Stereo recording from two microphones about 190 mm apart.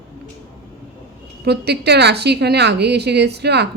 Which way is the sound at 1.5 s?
60° right (ahead or behind).